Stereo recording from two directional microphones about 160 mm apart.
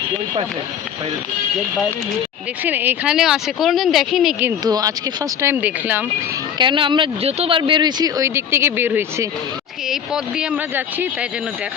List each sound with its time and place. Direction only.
2.6 s speech: 10° right (ahead or behind)
4.6 s speech: 25° right (ahead or behind)
6.6 s speech: 30° right (ahead or behind); by 11.3 s 10° right (ahead or behind)